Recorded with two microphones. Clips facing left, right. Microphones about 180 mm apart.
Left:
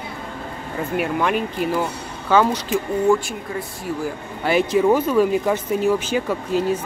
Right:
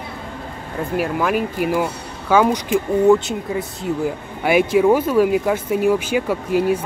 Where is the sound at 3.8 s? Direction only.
20° right (ahead or behind).